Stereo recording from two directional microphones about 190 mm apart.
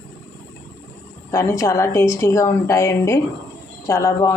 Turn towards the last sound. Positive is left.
turn(degrees=15)  # may be behind; listen again after turning